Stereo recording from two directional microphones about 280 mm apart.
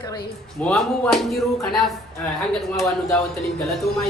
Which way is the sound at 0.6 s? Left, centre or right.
Centre.